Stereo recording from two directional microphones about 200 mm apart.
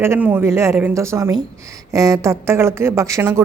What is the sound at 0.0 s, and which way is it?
A woman's voice, 10° right (ahead or behind).